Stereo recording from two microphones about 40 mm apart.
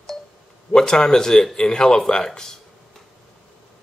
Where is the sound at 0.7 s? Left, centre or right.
Centre.